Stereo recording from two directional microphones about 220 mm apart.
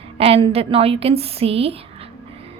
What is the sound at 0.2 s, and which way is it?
A woman's voice, 25° right (ahead or behind).